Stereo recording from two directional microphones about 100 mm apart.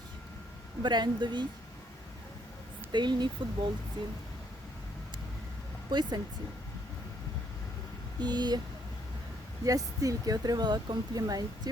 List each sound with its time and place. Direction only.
0.8 s speech: 50° right (ahead or behind)
2.9 s speech: 50° right (ahead or behind)
5.9 s speech: 45° right (ahead or behind)
8.2 s speech: 45° right (ahead or behind)
9.6 s speech: 35° right (ahead or behind)